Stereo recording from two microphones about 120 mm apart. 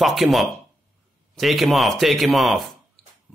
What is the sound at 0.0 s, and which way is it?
A man's voice, centre (ahead or behind).